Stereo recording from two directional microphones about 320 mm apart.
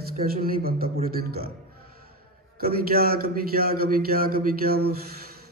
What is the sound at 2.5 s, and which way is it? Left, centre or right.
A man's voice, right.